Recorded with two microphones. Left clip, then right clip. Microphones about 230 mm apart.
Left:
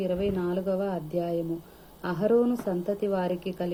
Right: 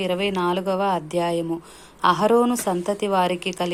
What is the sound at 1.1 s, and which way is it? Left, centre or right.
Speech, right.